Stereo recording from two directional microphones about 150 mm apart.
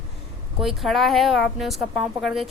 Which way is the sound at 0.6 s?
Centre (ahead or behind).